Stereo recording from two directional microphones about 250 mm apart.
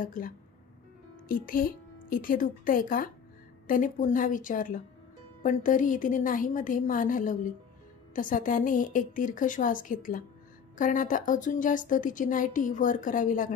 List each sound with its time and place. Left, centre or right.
0.0 s speech: left
1.3 s speech: left